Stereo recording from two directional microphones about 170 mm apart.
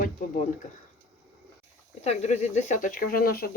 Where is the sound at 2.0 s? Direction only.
40° left (ahead or behind); by 3.4 s 60° left (ahead or behind).